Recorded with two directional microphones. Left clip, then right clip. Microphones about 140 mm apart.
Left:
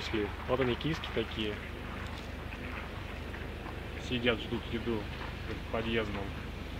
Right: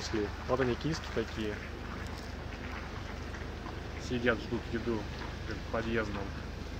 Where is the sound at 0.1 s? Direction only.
55° right (ahead or behind).